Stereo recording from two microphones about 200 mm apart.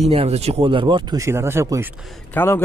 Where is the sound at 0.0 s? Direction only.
30° right (ahead or behind); by 1.9 s 15° right (ahead or behind).